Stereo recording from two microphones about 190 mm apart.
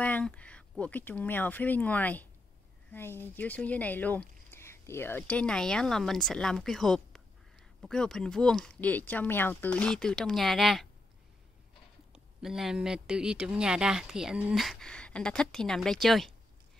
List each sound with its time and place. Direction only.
0.0 s speech: 5° left (ahead or behind)
12.4 s speech: centre (ahead or behind)